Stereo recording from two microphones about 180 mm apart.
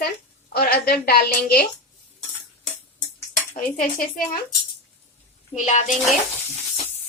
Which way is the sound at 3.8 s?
50° left (ahead or behind).